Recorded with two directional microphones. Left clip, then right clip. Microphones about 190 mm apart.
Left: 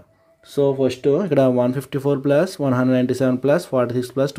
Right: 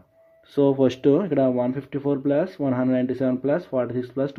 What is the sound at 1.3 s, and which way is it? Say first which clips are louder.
Speech: left 5 dB; 15° left (ahead or behind).